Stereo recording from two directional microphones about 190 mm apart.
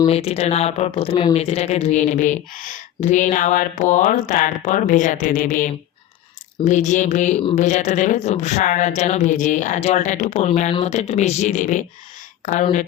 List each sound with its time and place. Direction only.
0.1 s speech: 35° left (ahead or behind)